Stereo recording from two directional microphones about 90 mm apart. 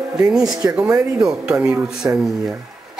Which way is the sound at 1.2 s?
10° right (ahead or behind).